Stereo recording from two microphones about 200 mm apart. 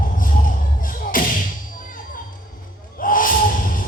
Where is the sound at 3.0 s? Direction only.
45° left (ahead or behind).